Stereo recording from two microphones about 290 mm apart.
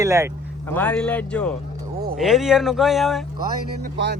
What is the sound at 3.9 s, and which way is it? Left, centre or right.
Speech, right.